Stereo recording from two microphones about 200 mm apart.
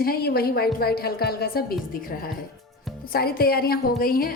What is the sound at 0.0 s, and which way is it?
A woman's voice, 50° left (ahead or behind).